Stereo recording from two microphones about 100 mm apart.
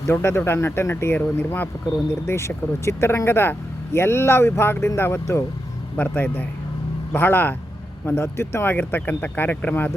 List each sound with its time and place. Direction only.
0.1 s speech: 25° left (ahead or behind)
6.0 s speech: 15° left (ahead or behind)